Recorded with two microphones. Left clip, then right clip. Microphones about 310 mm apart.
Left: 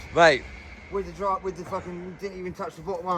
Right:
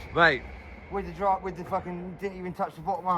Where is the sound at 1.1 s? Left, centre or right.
Right.